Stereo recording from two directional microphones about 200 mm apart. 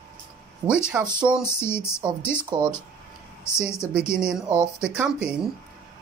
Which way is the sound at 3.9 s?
5° right (ahead or behind).